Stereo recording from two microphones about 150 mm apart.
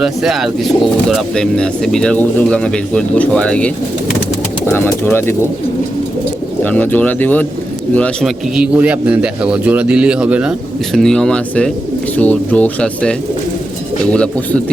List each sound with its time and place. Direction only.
0.0 s speech: centre (ahead or behind); by 5.4 s 15° left (ahead or behind)
6.6 s speech: 10° left (ahead or behind)
8.5 s a man's voice: 10° right (ahead or behind)
10.9 s speech: 5° left (ahead or behind)